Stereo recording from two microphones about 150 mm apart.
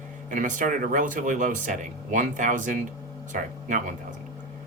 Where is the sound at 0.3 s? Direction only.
60° right (ahead or behind).